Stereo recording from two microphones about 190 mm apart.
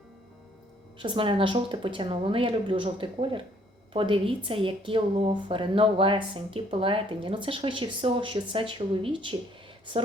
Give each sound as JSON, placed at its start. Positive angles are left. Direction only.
{"t": 0.9, "sound": "a woman's voice", "side_deg": -25}